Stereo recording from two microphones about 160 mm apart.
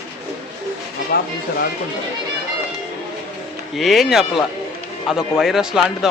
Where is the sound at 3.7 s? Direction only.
Centre (ahead or behind).